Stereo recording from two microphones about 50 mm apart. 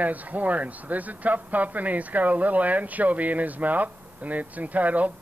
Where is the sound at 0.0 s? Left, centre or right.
Right.